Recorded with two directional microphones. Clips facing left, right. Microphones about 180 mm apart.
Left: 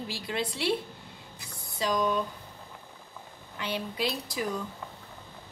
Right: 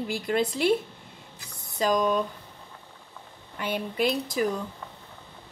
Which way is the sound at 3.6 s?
50° right (ahead or behind).